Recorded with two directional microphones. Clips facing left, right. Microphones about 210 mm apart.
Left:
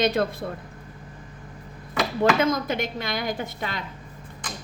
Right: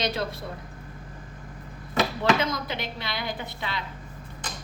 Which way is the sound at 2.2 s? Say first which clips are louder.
Left 6 dB; 50° left (ahead or behind).